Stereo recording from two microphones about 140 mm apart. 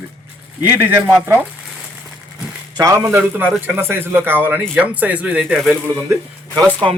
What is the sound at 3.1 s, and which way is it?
Speech, 10° right (ahead or behind).